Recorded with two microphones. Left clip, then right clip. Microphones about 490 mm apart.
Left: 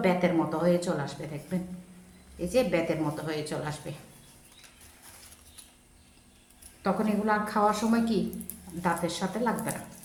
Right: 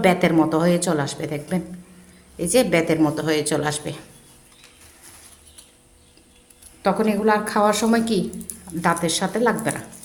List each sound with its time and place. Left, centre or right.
0.0 s a woman's voice: centre
6.8 s a woman's voice: centre